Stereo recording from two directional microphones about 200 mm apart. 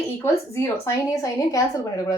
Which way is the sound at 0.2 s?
10° left (ahead or behind).